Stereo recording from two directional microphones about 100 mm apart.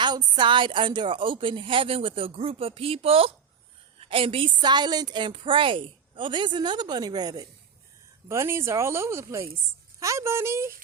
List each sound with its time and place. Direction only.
0.0 s a woman's voice: 50° right (ahead or behind); by 4.5 s 65° right (ahead or behind)
4.6 s a woman's voice: 45° right (ahead or behind)
8.3 s speech: 30° right (ahead or behind)